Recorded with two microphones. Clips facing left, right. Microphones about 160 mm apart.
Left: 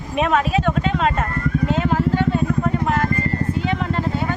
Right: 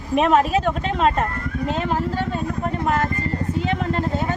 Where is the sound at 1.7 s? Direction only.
40° right (ahead or behind).